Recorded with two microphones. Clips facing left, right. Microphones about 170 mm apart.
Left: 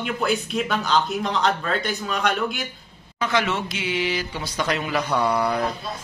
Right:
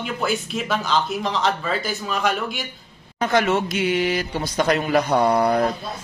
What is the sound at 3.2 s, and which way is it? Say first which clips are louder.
Speech: right 4 dB; 50° right (ahead or behind).